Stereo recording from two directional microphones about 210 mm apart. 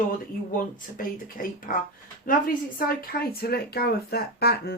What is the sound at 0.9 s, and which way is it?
Speech, 40° left (ahead or behind).